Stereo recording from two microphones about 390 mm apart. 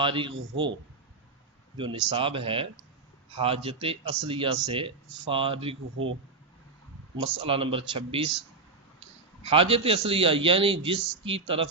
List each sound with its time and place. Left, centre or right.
0.0 s speech: centre
1.8 s speech: centre
6.0 s speech: right
7.2 s speech: centre
9.4 s speech: centre